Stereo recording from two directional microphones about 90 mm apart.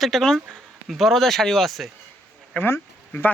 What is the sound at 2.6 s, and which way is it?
Speech, 25° left (ahead or behind).